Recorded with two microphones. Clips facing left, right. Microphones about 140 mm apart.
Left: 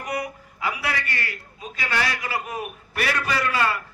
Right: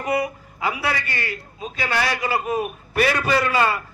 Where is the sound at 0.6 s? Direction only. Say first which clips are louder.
Right 3 dB; 25° right (ahead or behind).